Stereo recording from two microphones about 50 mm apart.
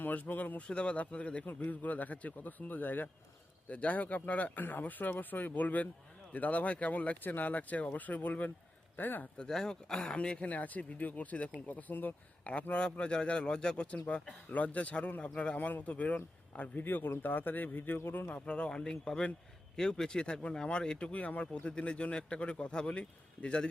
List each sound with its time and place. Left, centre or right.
0.0 s speech: left
0.7 s a man's voice: left
3.7 s speech: left
9.4 s a man's voice: centre; by 12.1 s left
12.7 s speech: centre
14.5 s a man's voice: left
16.8 s speech: left
18.3 s a man's voice: left